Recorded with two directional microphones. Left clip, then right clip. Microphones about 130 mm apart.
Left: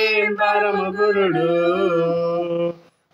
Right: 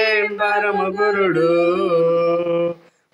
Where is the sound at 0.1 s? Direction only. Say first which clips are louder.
Even; 10° right (ahead or behind).